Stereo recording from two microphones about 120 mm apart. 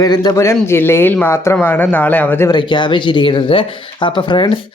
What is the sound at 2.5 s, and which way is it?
Speech, 40° left (ahead or behind).